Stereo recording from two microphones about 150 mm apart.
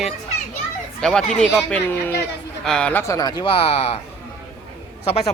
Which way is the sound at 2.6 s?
5° left (ahead or behind).